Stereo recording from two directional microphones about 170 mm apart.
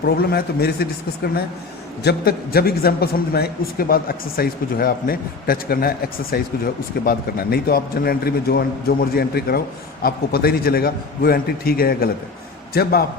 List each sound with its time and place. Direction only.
0.0 s a man's voice: 65° left (ahead or behind)